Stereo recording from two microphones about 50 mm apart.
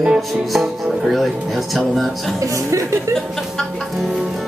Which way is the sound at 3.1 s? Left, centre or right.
Centre.